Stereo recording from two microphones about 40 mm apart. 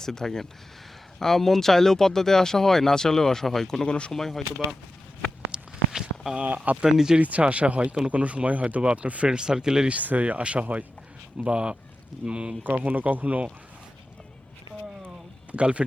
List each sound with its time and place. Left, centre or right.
0.0 s speech: centre
3.8 s speech: left
4.1 s speech: centre
5.5 s walk: centre
6.3 s speech: right
6.8 s speech: centre
7.2 s speech: right
9.3 s speech: centre
9.9 s speech: right
12.8 s speech: right
15.5 s speech: right